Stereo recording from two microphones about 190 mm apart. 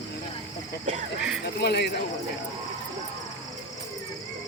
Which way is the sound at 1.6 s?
60° left (ahead or behind).